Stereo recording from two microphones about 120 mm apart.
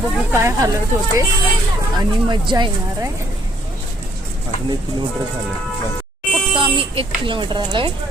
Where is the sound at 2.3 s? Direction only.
40° right (ahead or behind).